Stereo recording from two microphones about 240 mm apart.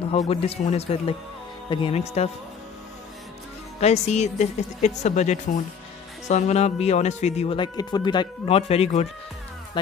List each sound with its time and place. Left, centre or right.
0.1 s speech: left
3.8 s speech: left